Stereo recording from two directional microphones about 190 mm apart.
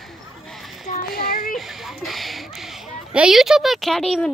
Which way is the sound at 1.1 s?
50° left (ahead or behind).